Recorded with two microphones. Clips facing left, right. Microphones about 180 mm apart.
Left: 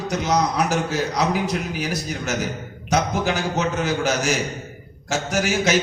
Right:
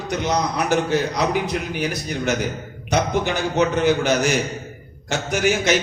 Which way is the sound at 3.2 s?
60° right (ahead or behind).